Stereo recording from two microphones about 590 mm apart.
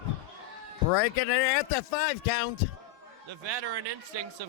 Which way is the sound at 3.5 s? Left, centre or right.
Right.